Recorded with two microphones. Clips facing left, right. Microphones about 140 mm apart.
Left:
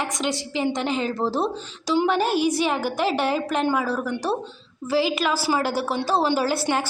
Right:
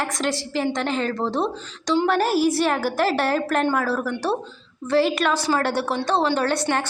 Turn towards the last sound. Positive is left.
turn(degrees=5)  # may be behind; listen again after turning